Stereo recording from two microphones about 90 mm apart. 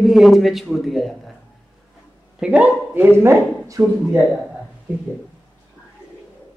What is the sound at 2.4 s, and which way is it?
Speech, 15° right (ahead or behind).